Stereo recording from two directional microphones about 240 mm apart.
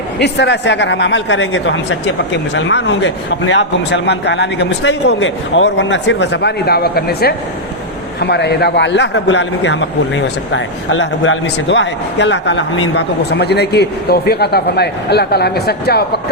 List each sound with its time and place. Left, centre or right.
0.2 s a man's voice: left